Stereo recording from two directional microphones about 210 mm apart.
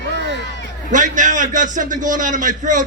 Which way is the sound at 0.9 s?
35° right (ahead or behind).